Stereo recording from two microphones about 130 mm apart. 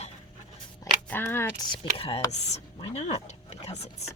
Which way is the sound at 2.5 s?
60° left (ahead or behind).